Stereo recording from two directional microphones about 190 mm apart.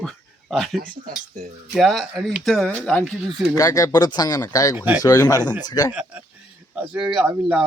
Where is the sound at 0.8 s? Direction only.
50° right (ahead or behind).